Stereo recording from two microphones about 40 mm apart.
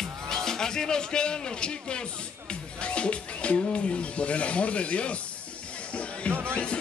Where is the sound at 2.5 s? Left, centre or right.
Left.